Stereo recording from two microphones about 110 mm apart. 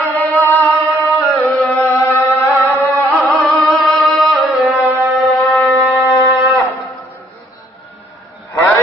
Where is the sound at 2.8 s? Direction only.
25° left (ahead or behind).